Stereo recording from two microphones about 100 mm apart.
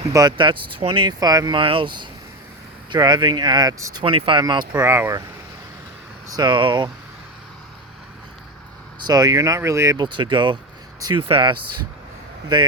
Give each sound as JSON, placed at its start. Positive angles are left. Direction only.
{"t": 0.3, "sound": "speech", "side_deg": -55}
{"t": 1.5, "sound": "speech", "side_deg": -60}
{"t": 4.0, "sound": "speech", "side_deg": -60}
{"t": 4.8, "sound": "speech", "side_deg": -25}
{"t": 6.3, "sound": "speech", "side_deg": -50}
{"t": 9.0, "sound": "speech", "side_deg": -40}
{"t": 10.0, "sound": "speech", "side_deg": -55}
{"t": 11.2, "sound": "speech", "side_deg": -65}